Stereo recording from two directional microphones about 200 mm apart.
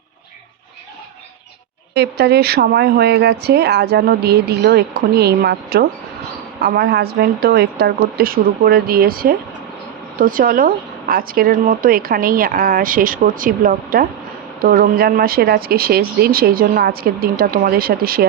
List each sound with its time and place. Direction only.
1.9 s speech: 55° right (ahead or behind)